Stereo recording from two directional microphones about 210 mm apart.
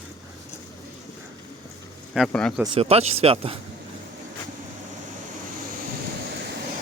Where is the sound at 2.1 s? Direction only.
Centre (ahead or behind).